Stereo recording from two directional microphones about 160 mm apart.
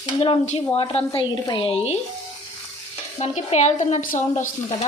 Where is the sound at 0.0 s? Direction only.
35° left (ahead or behind).